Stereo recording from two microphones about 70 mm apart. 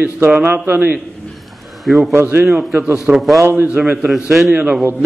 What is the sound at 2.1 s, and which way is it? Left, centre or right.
Speech, right.